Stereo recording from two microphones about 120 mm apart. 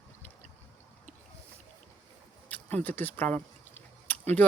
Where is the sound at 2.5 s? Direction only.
15° left (ahead or behind).